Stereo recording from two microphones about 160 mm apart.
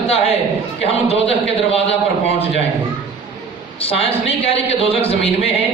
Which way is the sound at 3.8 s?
35° left (ahead or behind).